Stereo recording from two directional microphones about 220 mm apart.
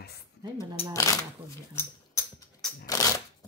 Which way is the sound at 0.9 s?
15° left (ahead or behind).